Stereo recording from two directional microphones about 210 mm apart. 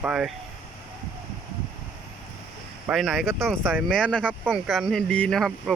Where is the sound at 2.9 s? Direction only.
Centre (ahead or behind).